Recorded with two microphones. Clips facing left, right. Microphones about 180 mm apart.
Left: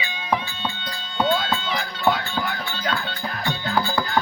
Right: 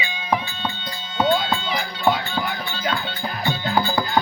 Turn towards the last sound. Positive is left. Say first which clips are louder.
# right 2 dB
turn(degrees=-20)  # may be behind; listen again after turning